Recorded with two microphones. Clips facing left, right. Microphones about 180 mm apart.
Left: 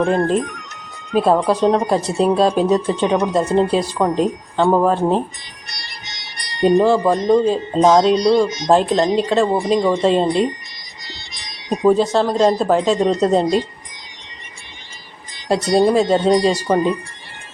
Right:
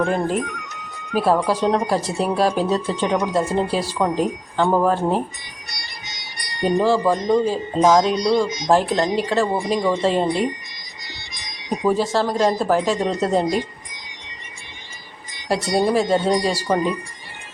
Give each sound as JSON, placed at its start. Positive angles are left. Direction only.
{"t": 1.1, "sound": "speech", "side_deg": 20}
{"t": 6.6, "sound": "speech", "side_deg": 20}
{"t": 11.7, "sound": "speech", "side_deg": 20}
{"t": 15.4, "sound": "speech", "side_deg": 20}